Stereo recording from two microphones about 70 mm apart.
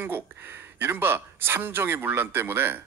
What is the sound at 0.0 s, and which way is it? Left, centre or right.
Speech, right.